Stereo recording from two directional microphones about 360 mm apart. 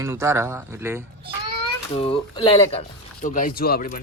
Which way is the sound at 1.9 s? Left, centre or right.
Centre.